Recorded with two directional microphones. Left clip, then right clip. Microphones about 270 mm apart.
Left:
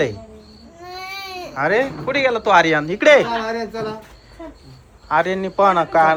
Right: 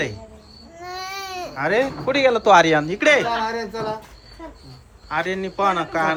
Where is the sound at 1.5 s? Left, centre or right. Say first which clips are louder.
Left 2 dB; centre.